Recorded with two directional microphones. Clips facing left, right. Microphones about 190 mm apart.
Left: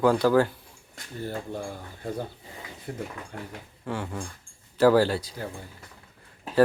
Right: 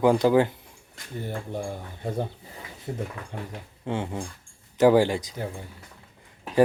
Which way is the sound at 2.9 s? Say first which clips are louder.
Right 3 dB; 20° right (ahead or behind).